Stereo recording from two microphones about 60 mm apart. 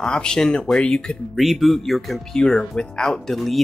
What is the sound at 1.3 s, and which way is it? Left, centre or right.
Speech, centre.